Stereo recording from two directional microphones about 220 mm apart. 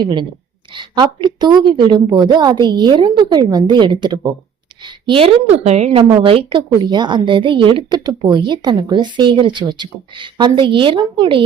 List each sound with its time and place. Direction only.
0.0 s a woman's voice: 20° right (ahead or behind)